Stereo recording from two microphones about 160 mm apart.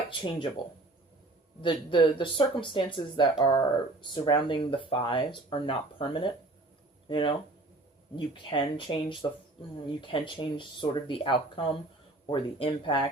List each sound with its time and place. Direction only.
0.1 s speech: 30° left (ahead or behind)
1.6 s speech: 30° left (ahead or behind)